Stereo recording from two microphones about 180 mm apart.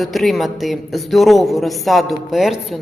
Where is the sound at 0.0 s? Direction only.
Centre (ahead or behind).